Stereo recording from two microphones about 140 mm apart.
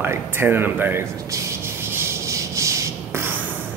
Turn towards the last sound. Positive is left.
turn(degrees=-20)  # may be behind; listen again after turning